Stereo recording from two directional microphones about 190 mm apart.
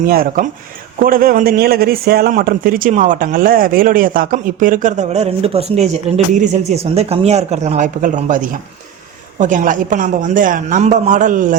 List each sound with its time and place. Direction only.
0.1 s a man's voice: 50° right (ahead or behind)